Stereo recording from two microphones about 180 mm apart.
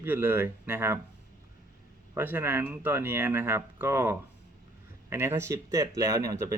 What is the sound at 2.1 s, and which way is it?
Speech, 10° right (ahead or behind).